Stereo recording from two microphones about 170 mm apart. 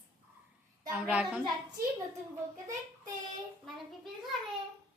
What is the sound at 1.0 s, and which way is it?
Speech, 5° right (ahead or behind).